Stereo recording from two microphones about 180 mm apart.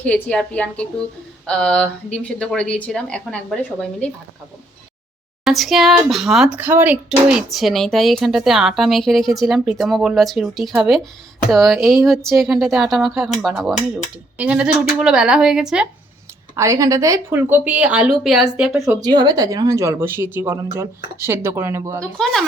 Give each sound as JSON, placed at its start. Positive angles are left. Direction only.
{"t": 0.0, "sound": "speech", "side_deg": 5}
{"t": 5.5, "sound": "speech", "side_deg": 0}
{"t": 16.6, "sound": "speech", "side_deg": -15}
{"t": 18.9, "sound": "speech", "side_deg": -20}
{"t": 22.0, "sound": "speech", "side_deg": 0}